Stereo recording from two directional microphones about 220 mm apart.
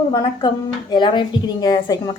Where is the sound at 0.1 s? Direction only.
20° left (ahead or behind).